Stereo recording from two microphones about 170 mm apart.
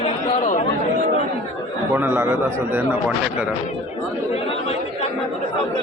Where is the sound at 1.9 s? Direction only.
15° right (ahead or behind).